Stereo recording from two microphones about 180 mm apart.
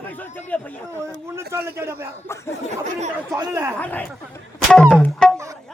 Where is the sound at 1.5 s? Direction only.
15° right (ahead or behind).